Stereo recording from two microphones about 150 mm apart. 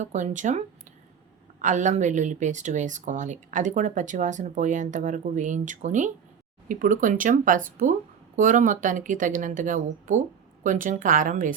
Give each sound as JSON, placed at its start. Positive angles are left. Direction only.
{"t": 0.0, "sound": "speech", "side_deg": -50}
{"t": 1.6, "sound": "speech", "side_deg": -55}